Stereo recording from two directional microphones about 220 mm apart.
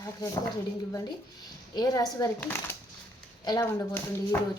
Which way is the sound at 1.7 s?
15° left (ahead or behind).